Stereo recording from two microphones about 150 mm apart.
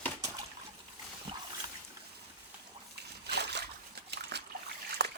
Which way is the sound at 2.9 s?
90° right.